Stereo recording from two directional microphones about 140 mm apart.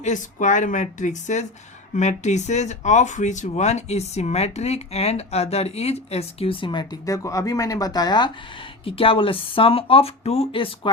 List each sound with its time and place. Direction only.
0.0 s speech: 65° left (ahead or behind); by 8.3 s 30° left (ahead or behind)
8.8 s speech: 40° left (ahead or behind)